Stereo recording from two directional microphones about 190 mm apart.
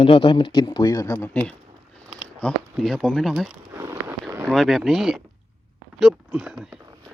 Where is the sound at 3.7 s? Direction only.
15° right (ahead or behind).